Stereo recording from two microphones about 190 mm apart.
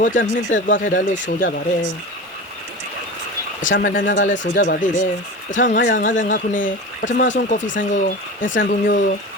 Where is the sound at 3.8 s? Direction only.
45° left (ahead or behind).